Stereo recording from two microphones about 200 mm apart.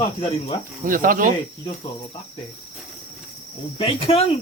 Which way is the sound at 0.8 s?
45° right (ahead or behind).